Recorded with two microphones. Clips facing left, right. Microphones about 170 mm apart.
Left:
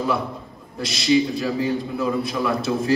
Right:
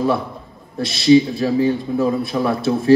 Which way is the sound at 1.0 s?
35° right (ahead or behind).